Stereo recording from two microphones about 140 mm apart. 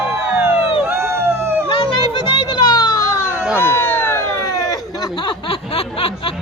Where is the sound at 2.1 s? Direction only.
30° left (ahead or behind).